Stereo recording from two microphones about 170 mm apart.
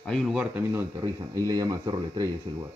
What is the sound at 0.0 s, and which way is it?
Speech, 5° left (ahead or behind).